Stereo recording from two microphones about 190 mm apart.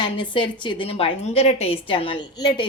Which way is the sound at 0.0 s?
25° left (ahead or behind).